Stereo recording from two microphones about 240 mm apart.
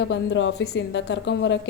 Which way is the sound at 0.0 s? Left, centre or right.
Left.